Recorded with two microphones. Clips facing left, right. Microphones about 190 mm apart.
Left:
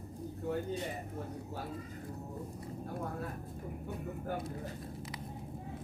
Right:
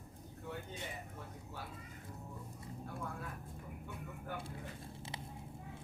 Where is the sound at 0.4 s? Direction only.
40° left (ahead or behind).